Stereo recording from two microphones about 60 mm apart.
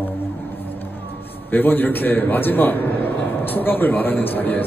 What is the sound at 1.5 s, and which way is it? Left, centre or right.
A man's voice, left.